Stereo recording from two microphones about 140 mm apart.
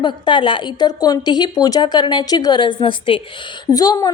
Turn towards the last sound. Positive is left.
turn(degrees=25)  # may be behind; listen again after turning